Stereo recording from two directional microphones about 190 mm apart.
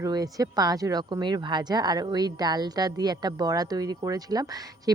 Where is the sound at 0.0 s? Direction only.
20° right (ahead or behind).